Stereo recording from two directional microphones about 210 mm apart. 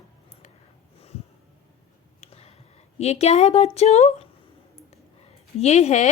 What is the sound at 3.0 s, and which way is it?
Speech, 30° left (ahead or behind).